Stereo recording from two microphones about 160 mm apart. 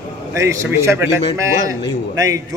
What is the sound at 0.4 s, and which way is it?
Speech, 15° right (ahead or behind).